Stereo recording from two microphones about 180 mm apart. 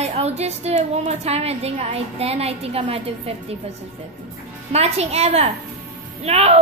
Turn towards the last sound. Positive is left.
turn(degrees=-35)  # may be behind; listen again after turning